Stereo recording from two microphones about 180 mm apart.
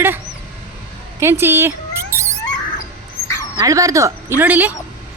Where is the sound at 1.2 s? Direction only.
15° right (ahead or behind).